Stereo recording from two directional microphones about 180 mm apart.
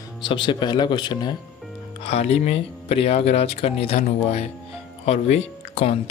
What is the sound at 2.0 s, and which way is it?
Speech, 35° left (ahead or behind).